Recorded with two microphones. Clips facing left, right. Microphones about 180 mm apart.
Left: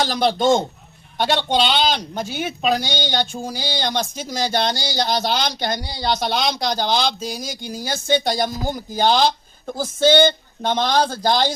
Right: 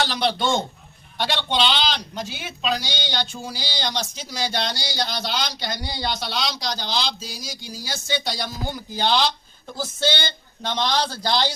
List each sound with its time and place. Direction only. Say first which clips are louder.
0.0 s speech: left 5 dB; 45° left (ahead or behind)